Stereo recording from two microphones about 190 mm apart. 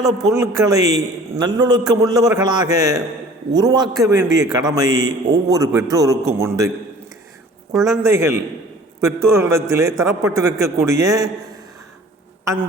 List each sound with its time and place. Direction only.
0.2 s a man's voice: 15° right (ahead or behind)
7.7 s a man's voice: 15° right (ahead or behind)